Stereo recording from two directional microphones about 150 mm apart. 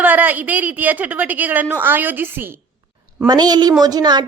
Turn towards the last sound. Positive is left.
turn(degrees=-25)  # may be behind; listen again after turning